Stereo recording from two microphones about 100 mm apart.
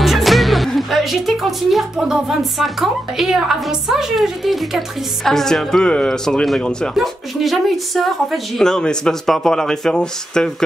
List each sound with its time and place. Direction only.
0.0 s speech: centre (ahead or behind)